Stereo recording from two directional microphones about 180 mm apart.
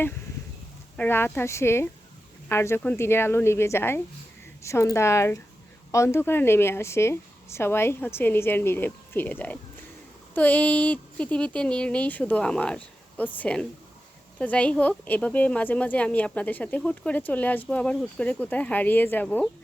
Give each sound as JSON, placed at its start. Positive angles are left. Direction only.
{"t": 0.9, "sound": "speech", "side_deg": 10}